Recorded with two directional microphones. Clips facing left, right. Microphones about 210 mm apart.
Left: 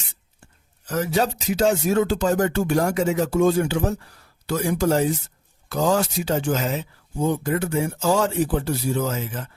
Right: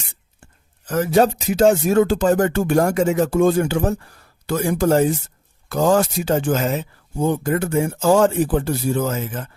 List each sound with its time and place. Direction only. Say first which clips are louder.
0.9 s speech: right 6 dB; 55° right (ahead or behind)